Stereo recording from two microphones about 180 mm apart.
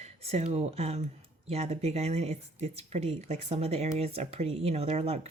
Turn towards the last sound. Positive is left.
turn(degrees=-35)  # may be behind; listen again after turning